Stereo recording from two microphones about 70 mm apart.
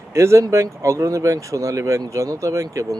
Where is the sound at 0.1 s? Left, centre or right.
Right.